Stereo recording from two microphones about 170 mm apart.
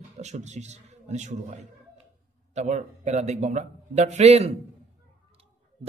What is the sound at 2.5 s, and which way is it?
Speech, 45° right (ahead or behind).